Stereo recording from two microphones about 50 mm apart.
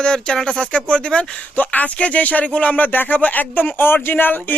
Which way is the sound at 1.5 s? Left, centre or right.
Left.